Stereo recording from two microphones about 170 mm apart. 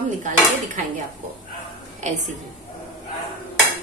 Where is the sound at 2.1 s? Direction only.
45° right (ahead or behind).